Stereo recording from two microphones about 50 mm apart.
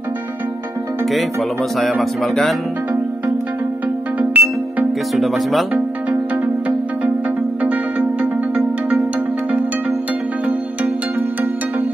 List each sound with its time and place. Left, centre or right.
2.0 s speech: centre
4.2 s music: right
5.1 s speech: centre
8.2 s music: right